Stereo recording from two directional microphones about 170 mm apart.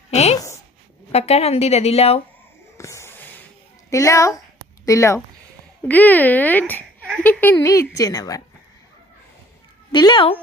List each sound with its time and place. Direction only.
0.1 s a woman's voice: 40° left (ahead or behind)
2.7 s a sound: 15° left (ahead or behind)
3.8 s speech: 20° left (ahead or behind)
9.9 s speech: 25° left (ahead or behind)